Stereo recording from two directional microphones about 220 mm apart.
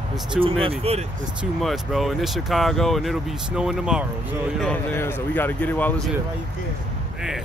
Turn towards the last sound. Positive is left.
turn(degrees=10)  # may be behind; listen again after turning